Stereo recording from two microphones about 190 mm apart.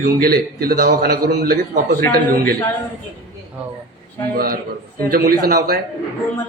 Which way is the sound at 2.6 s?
10° left (ahead or behind).